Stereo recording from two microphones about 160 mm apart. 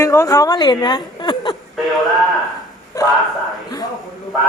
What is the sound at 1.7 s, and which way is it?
Speech, centre (ahead or behind).